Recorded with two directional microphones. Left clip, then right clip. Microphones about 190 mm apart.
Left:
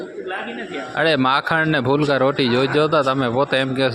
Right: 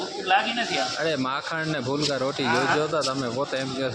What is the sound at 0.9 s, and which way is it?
Speech, 45° left (ahead or behind).